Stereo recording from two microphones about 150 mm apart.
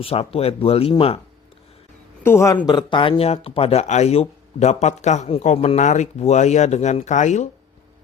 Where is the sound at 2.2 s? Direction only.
20° left (ahead or behind).